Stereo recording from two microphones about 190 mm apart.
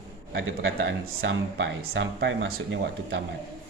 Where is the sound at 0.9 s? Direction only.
75° right (ahead or behind).